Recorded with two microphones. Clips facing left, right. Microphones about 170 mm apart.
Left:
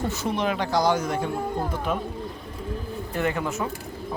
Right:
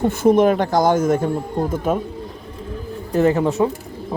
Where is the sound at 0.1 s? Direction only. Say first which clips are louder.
Right 12 dB; 50° right (ahead or behind).